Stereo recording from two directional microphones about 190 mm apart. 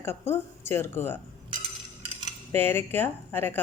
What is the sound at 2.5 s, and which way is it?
A woman's voice, 10° left (ahead or behind).